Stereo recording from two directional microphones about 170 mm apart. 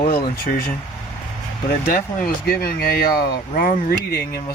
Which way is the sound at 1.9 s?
60° left (ahead or behind).